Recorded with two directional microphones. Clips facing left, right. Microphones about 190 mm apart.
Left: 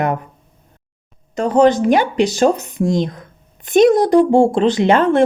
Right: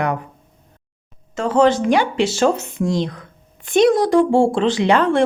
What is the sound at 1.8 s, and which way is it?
Speech, 45° left (ahead or behind).